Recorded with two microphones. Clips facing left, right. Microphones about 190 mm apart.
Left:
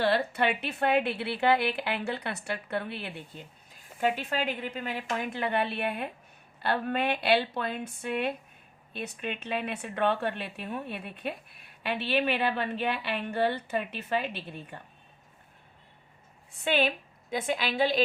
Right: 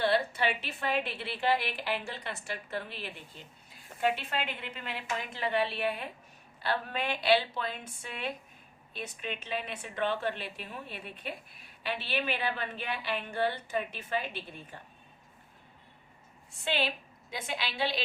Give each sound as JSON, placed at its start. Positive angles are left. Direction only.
{"t": 0.1, "sound": "speech", "side_deg": 65}
{"t": 3.3, "sound": "a woman's voice", "side_deg": 55}
{"t": 4.0, "sound": "a woman's voice", "side_deg": 40}
{"t": 16.6, "sound": "a woman's voice", "side_deg": 50}